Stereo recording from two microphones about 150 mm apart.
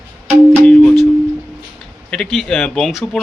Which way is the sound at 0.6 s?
10° left (ahead or behind).